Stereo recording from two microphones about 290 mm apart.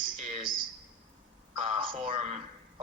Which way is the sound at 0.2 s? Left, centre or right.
Right.